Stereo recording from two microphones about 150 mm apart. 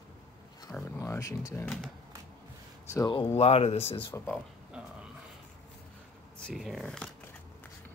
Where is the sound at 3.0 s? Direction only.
40° left (ahead or behind).